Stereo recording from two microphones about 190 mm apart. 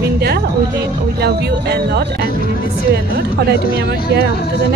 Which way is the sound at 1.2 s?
60° right (ahead or behind).